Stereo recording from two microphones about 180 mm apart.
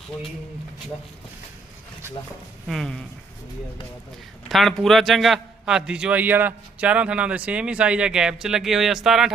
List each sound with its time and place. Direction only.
2.6 s a man's voice: centre (ahead or behind)
4.4 s a man's voice: centre (ahead or behind)